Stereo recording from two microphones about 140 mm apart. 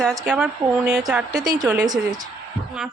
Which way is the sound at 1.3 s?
30° right (ahead or behind).